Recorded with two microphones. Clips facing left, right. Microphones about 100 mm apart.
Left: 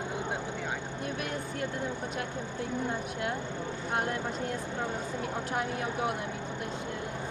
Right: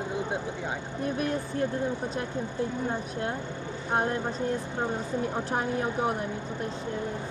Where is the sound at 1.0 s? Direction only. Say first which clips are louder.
Right 9 dB; 30° right (ahead or behind).